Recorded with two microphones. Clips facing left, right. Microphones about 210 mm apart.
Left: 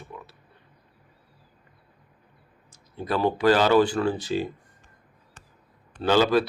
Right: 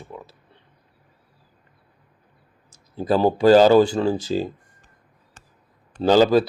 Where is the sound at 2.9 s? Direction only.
30° right (ahead or behind).